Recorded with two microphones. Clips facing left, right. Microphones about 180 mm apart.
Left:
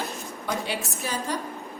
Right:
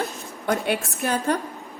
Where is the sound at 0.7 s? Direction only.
55° right (ahead or behind).